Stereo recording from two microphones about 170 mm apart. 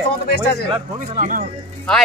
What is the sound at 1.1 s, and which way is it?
Speech, 50° right (ahead or behind).